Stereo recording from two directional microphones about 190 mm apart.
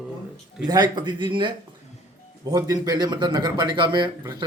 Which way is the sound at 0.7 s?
20° right (ahead or behind).